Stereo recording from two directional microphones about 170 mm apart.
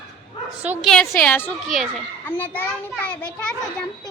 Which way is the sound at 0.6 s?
10° right (ahead or behind).